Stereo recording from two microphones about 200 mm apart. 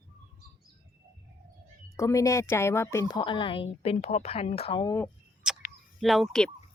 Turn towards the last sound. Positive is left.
turn(degrees=0)  # may be behind; listen again after turning